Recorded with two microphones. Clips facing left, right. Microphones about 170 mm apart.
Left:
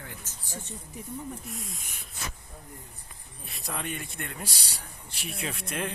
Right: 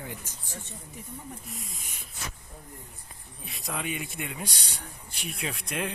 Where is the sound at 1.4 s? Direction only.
Centre (ahead or behind).